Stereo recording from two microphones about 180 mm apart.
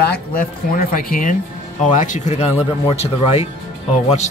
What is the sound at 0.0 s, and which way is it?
Speech, 55° left (ahead or behind).